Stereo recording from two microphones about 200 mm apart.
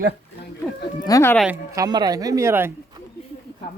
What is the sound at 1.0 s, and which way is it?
Speech, 15° left (ahead or behind).